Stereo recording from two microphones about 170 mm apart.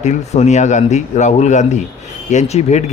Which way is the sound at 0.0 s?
40° left (ahead or behind).